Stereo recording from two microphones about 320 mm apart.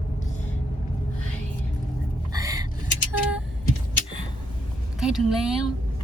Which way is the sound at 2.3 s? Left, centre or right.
Centre.